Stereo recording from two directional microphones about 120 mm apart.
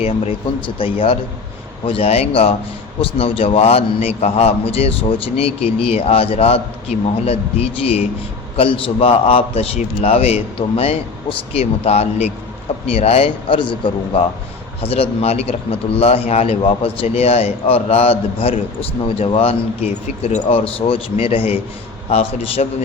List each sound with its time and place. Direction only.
0.8 s a man's voice: 50° left (ahead or behind)
14.8 s a man's voice: 55° left (ahead or behind)